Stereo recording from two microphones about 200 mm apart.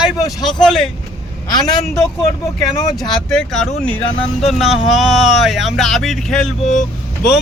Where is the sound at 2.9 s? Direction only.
Centre (ahead or behind).